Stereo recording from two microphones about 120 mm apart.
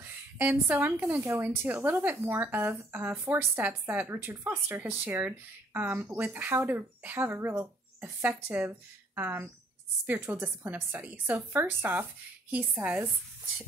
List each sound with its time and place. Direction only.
0.0 s a woman's voice: 15° right (ahead or behind)